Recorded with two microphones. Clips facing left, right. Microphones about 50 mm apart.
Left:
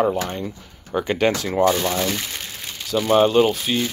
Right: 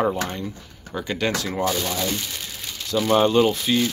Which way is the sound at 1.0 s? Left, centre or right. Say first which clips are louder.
Left 4 dB; left.